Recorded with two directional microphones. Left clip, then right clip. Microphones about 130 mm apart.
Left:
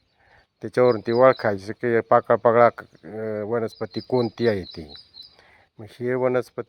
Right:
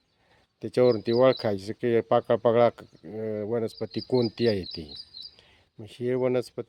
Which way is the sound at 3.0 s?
20° right (ahead or behind).